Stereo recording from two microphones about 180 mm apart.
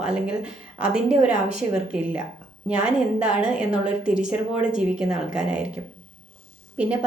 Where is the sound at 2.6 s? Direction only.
5° right (ahead or behind).